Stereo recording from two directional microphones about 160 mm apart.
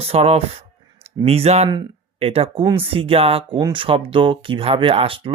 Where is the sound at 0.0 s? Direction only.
40° right (ahead or behind).